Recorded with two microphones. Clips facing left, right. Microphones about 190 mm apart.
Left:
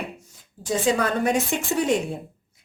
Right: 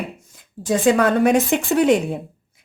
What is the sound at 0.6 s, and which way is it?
Speech, 60° right (ahead or behind).